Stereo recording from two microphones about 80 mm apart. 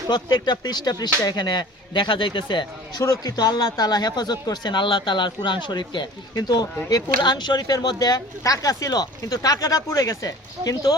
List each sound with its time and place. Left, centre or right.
0.1 s speech: left
3.0 s speech: left
6.3 s speech: left